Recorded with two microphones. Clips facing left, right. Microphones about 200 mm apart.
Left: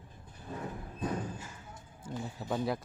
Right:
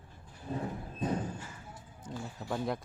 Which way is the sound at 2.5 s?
Centre (ahead or behind).